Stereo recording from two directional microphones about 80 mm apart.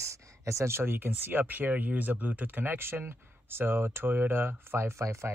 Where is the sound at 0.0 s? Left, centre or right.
Right.